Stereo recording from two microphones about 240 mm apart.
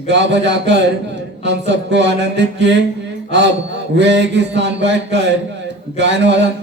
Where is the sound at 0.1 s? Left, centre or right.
Right.